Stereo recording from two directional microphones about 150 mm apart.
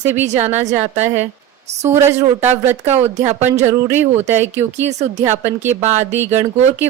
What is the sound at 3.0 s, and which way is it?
Speech, 50° right (ahead or behind).